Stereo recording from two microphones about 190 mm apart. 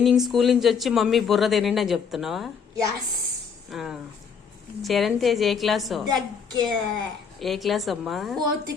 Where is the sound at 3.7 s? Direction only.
Centre (ahead or behind).